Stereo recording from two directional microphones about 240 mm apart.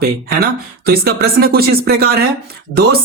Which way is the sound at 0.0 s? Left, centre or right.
Right.